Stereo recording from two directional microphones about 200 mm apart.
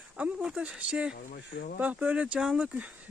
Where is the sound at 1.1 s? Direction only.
50° left (ahead or behind).